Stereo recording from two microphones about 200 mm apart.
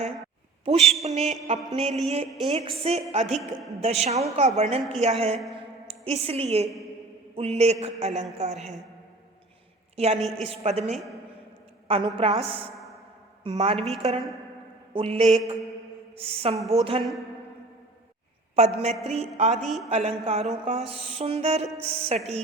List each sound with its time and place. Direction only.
0.6 s a woman's voice: 30° right (ahead or behind)
1.2 s a woman's voice: centre (ahead or behind)
1.7 s music: 30° right (ahead or behind)
5.9 s a woman's voice: 30° right (ahead or behind)
7.3 s music: 30° right (ahead or behind)
9.9 s a woman's voice: 30° right (ahead or behind)
10.2 s a woman's voice: centre (ahead or behind)
10.4 s music: 30° right (ahead or behind)
11.9 s a woman's voice: 25° right (ahead or behind)
18.5 s a woman's voice: 30° right (ahead or behind)
19.0 s music: 30° right (ahead or behind)
19.6 s a woman's voice: centre (ahead or behind)
19.9 s music: 30° right (ahead or behind)